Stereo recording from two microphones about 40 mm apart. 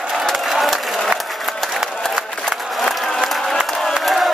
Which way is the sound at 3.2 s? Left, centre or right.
Centre.